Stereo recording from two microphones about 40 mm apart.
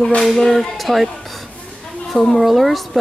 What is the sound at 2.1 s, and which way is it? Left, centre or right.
Speech, centre.